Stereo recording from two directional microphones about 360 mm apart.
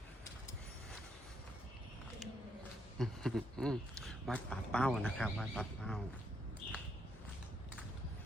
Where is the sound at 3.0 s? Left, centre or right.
Centre.